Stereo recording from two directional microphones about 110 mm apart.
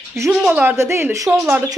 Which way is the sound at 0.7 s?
25° right (ahead or behind).